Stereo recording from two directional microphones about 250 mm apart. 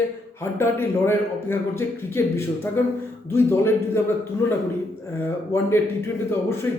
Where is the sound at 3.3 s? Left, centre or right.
Centre.